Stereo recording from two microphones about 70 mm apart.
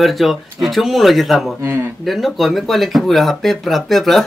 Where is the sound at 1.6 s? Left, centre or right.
Right.